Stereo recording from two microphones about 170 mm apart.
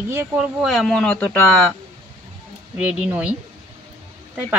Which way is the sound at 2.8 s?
10° right (ahead or behind).